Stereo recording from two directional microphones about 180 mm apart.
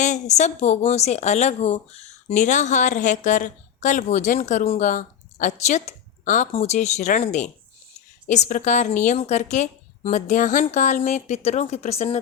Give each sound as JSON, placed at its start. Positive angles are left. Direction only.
{"t": 0.0, "sound": "a woman's voice", "side_deg": 40}